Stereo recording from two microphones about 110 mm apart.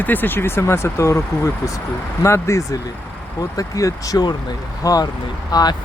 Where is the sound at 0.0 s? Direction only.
15° left (ahead or behind).